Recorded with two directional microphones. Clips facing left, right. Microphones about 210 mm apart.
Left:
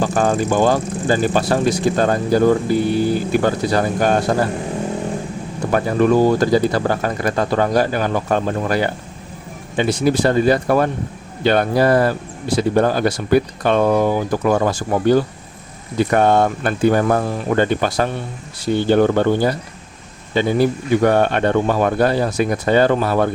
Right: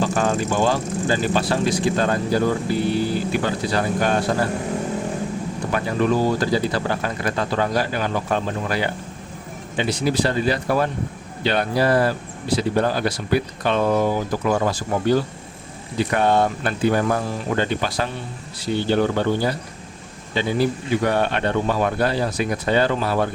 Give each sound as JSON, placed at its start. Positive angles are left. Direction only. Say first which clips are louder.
{"t": 0.0, "sound": "speech", "louder": "left 3 dB", "side_deg": 45}
{"t": 5.7, "sound": "speech", "louder": "left 6 dB", "side_deg": 50}